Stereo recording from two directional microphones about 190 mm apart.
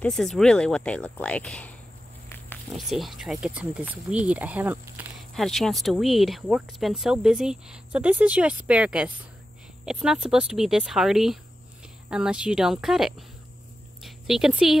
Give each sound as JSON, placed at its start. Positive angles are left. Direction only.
{"t": 0.0, "sound": "speech", "side_deg": 0}
{"t": 2.2, "sound": "a sound", "side_deg": 10}
{"t": 2.7, "sound": "speech", "side_deg": 0}
{"t": 5.3, "sound": "speech", "side_deg": 0}